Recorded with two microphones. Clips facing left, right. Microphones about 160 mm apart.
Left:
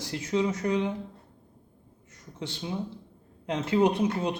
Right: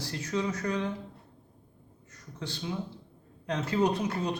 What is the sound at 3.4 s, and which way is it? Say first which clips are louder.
Speech: left 3 dB; 20° left (ahead or behind).